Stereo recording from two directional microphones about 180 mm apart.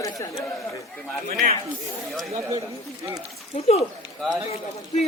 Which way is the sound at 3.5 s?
35° left (ahead or behind).